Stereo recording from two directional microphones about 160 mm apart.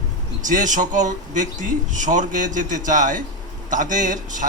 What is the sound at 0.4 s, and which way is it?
A man's voice, 55° right (ahead or behind).